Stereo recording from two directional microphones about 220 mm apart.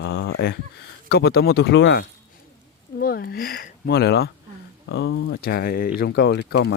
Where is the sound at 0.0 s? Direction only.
60° left (ahead or behind).